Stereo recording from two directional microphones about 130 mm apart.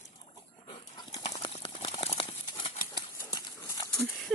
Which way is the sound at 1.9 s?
45° left (ahead or behind).